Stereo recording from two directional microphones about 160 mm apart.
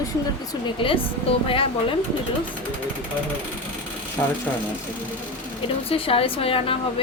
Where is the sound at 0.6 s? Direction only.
35° left (ahead or behind).